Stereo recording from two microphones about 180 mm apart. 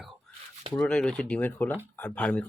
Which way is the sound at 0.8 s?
5° left (ahead or behind).